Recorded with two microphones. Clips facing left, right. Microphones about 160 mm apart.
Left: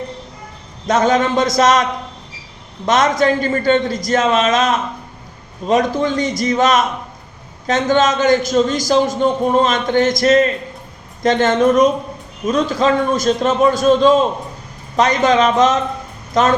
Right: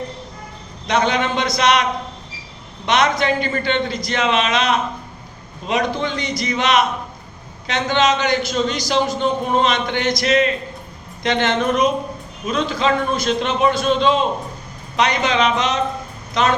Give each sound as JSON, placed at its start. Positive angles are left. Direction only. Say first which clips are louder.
{"t": 0.9, "sound": "a man's voice", "louder": "left 4 dB", "side_deg": 45}